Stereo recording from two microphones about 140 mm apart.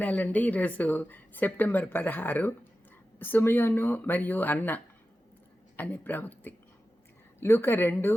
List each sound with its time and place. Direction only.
0.0 s a woman's voice: 10° left (ahead or behind)